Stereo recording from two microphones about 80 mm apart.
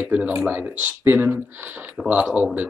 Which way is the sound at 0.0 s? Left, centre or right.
Centre.